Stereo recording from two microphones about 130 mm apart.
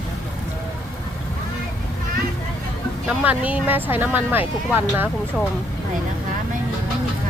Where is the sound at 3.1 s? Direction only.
10° right (ahead or behind).